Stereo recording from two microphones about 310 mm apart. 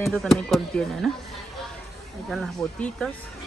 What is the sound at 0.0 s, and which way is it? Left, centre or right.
Speech, centre.